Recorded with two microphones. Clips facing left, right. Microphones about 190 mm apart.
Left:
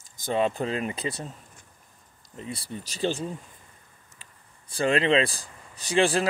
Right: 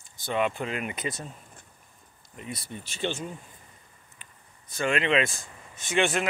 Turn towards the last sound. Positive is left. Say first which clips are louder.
# left 3 dB
turn(degrees=30)  # may be behind; listen again after turning